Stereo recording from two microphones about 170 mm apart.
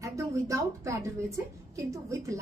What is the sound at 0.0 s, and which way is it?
A woman's voice, 20° right (ahead or behind).